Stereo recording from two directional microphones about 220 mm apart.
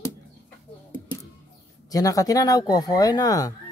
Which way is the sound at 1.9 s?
15° left (ahead or behind).